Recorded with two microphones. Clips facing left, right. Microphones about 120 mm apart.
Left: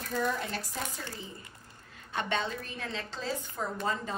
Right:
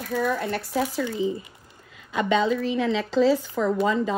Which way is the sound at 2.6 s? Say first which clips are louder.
Right 15 dB; 90° right.